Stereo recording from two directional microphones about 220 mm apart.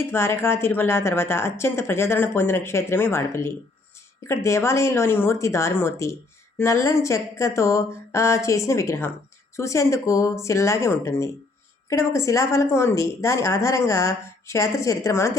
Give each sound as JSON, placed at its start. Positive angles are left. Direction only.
{"t": 0.0, "sound": "a woman's voice", "side_deg": 10}